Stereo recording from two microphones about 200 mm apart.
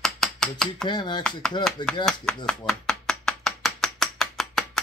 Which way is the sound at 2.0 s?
Centre (ahead or behind).